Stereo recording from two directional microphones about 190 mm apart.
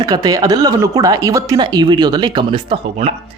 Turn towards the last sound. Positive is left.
turn(degrees=-30)  # may be behind; listen again after turning